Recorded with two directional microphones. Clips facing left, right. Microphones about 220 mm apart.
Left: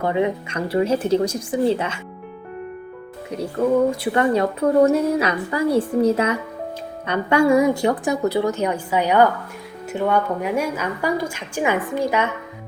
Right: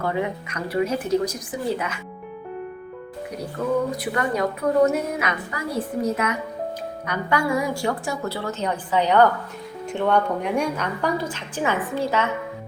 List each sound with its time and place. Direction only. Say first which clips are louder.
0.0 s speech: left 5 dB; 20° left (ahead or behind)
4.0 s a woman's voice: left 5 dB; 30° left (ahead or behind)